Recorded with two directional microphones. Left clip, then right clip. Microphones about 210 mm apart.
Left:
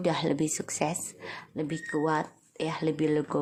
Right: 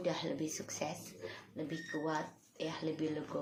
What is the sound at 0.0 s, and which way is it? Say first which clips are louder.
Speech: left 10 dB; 45° left (ahead or behind).